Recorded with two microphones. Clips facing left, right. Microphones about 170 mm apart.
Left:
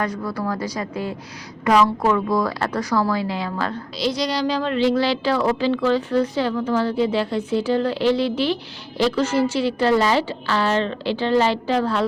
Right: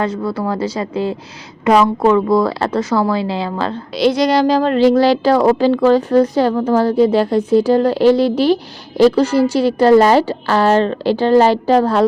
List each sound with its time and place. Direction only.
0.0 s a woman's voice: 25° right (ahead or behind)
3.9 s speech: 55° right (ahead or behind); by 12.0 s 40° right (ahead or behind)